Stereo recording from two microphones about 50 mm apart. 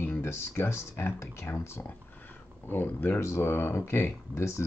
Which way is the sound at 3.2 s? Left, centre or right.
Left.